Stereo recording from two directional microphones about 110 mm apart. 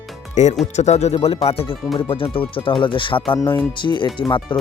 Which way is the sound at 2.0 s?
55° left (ahead or behind).